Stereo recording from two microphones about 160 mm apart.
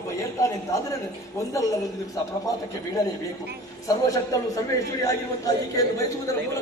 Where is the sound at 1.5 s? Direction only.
20° left (ahead or behind).